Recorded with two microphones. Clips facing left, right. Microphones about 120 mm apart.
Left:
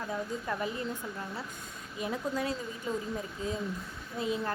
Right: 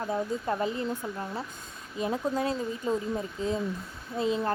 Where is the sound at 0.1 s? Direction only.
30° right (ahead or behind).